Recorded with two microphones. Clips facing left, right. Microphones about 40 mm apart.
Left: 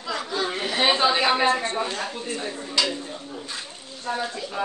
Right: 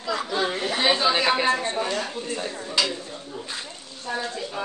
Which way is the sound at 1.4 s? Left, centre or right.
Left.